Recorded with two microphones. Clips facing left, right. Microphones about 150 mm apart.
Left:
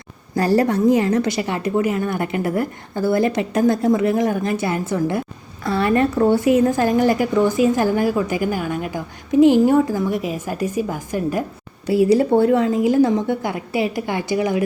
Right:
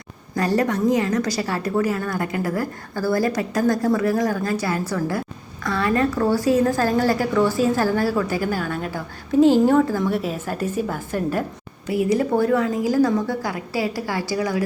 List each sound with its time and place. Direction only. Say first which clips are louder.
0.3 s a woman's voice: left 4 dB; 30° left (ahead or behind); by 11.4 s 10° left (ahead or behind)
11.9 s a woman's voice: left 5 dB; 30° left (ahead or behind)